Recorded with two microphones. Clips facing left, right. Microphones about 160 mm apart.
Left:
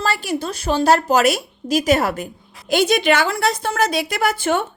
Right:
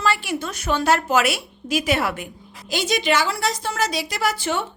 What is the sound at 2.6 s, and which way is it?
A woman's voice, 55° left (ahead or behind).